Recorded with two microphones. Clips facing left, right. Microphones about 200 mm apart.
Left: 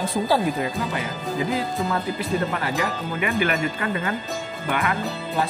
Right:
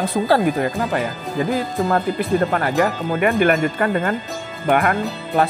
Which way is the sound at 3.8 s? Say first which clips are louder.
Right 6 dB; 50° right (ahead or behind).